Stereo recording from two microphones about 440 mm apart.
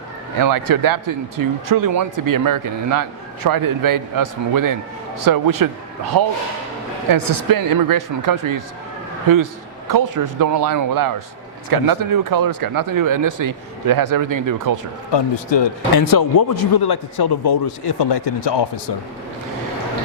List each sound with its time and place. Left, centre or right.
0.3 s speech: right
9.9 s speech: right
15.1 s speech: left
16.0 s a man's voice: left